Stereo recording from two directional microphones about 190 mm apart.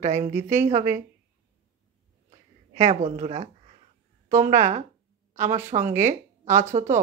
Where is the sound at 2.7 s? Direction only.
40° right (ahead or behind).